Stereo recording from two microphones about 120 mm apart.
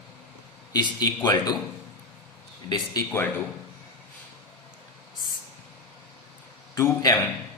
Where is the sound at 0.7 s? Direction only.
35° left (ahead or behind).